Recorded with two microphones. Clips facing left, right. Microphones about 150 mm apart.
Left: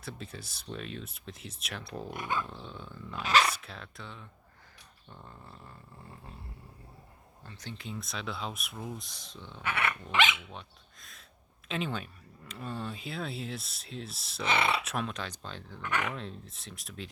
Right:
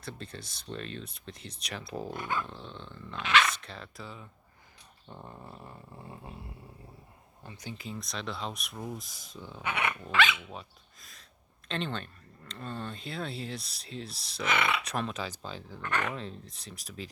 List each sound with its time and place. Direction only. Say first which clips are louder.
0.0 s speech: right 1 dB; 5° left (ahead or behind)
2.0 s dog: left 1 dB; 15° left (ahead or behind)
2.4 s dog: even; centre (ahead or behind)
3.2 s speech: even; 35° left (ahead or behind)
3.5 s speech: right 1 dB; 5° left (ahead or behind)
5.0 s a sound: right 5 dB; 20° right (ahead or behind)
7.4 s speech: right 2 dB; 10° right (ahead or behind)
9.3 s a sound: right 1 dB; 10° right (ahead or behind)
10.1 s speech: right 1 dB; 20° left (ahead or behind)
10.5 s speech: right 2 dB; centre (ahead or behind)
14.4 s speech: left 1 dB; 30° left (ahead or behind)
14.8 s speech: right 1 dB; centre (ahead or behind)